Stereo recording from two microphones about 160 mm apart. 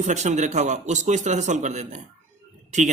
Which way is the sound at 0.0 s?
45° right (ahead or behind).